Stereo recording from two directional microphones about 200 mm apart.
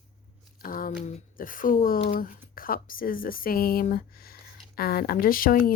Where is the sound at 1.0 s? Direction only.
30° left (ahead or behind).